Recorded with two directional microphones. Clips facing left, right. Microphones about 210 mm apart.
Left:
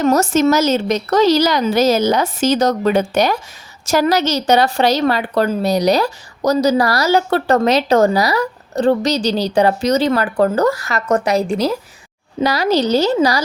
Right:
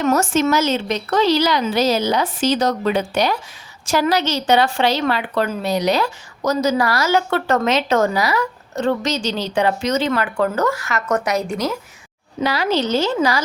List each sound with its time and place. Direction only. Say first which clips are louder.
0.0 s a woman's voice: left 4 dB; 40° left (ahead or behind)